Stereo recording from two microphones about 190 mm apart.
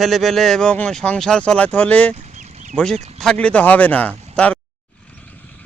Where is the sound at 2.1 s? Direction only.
40° right (ahead or behind).